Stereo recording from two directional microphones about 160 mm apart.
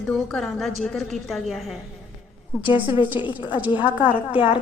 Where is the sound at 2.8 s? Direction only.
30° left (ahead or behind).